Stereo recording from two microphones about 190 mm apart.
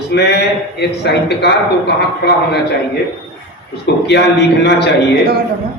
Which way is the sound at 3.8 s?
65° left (ahead or behind).